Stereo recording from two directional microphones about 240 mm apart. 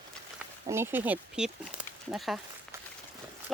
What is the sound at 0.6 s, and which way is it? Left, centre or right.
Speech, centre.